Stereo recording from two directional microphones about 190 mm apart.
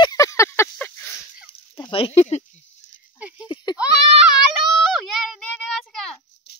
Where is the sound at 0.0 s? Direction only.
20° left (ahead or behind).